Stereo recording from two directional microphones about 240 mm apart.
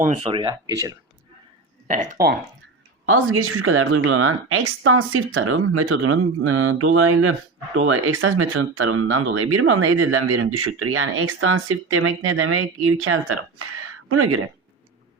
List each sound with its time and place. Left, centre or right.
0.0 s speech: right
3.1 s speech: right